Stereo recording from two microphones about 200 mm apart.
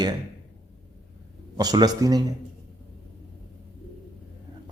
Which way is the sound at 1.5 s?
20° right (ahead or behind).